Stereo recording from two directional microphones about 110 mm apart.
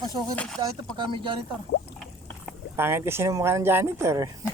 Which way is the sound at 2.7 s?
20° right (ahead or behind).